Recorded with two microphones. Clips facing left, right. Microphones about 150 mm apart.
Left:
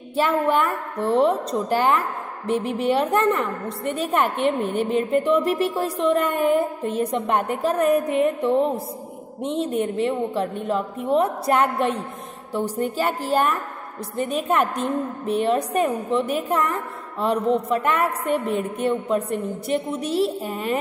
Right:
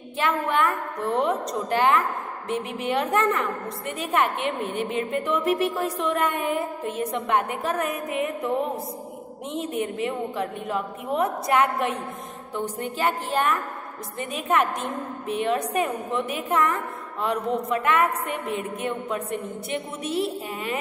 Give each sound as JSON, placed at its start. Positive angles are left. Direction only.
{"t": 0.1, "sound": "a woman's voice", "side_deg": 35}